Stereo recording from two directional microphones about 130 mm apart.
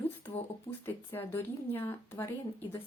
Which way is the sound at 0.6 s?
15° left (ahead or behind).